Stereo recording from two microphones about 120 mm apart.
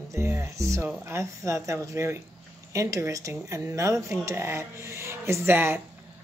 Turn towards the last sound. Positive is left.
turn(degrees=-20)  # may be behind; listen again after turning